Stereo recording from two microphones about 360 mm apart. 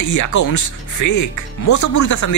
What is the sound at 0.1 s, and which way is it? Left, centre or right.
Speech, left.